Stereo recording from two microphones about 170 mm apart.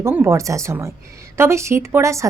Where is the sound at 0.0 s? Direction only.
15° right (ahead or behind).